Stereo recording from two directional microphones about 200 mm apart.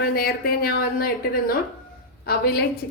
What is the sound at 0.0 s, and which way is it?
A woman's voice, 50° left (ahead or behind).